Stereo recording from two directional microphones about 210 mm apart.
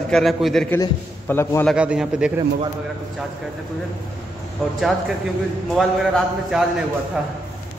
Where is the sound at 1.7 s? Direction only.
5° right (ahead or behind).